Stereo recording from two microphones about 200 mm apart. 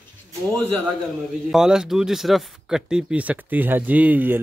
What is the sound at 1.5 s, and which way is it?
Speech, 5° right (ahead or behind).